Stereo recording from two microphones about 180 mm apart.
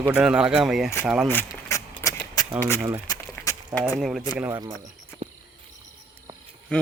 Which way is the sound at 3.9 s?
Centre (ahead or behind).